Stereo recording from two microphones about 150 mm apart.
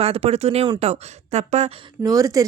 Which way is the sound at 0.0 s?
40° right (ahead or behind).